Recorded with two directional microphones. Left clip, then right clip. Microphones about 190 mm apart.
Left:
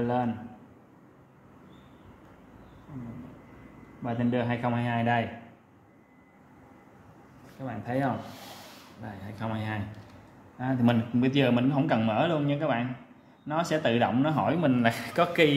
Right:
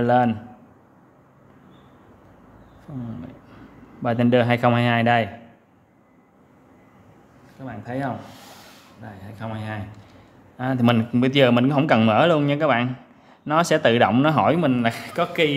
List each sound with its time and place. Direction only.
0.0 s a man's voice: 50° right (ahead or behind)
4.0 s a man's voice: 50° right (ahead or behind)
7.6 s speech: 5° right (ahead or behind)
10.6 s a man's voice: 35° right (ahead or behind)
14.7 s a man's voice: 15° right (ahead or behind)